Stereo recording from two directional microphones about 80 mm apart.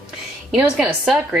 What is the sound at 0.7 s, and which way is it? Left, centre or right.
Speech, centre.